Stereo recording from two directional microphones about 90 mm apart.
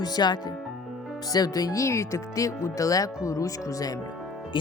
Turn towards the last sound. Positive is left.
turn(degrees=40)  # may be behind; listen again after turning